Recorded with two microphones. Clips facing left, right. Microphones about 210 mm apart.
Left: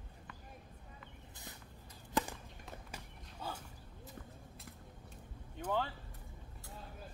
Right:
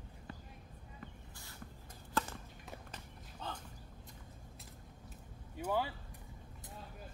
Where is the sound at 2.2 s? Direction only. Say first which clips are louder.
Left 2 dB; 15° left (ahead or behind).